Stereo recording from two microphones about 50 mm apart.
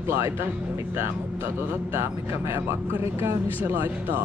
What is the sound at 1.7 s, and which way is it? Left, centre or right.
Speech, right.